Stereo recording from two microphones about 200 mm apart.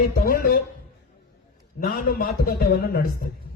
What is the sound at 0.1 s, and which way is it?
Speech, 45° left (ahead or behind).